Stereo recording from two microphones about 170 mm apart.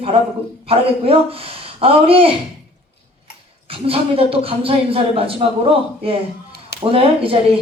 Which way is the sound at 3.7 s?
35° right (ahead or behind).